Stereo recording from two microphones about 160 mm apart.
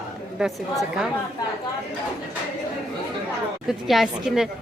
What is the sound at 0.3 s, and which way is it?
Speech, centre (ahead or behind).